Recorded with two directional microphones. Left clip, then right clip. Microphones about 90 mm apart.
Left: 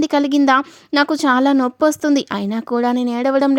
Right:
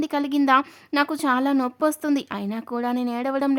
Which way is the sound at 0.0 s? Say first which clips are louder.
Left 8 dB; 70° left (ahead or behind).